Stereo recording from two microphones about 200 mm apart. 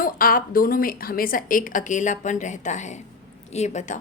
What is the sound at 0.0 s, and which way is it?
A woman's voice, 45° left (ahead or behind).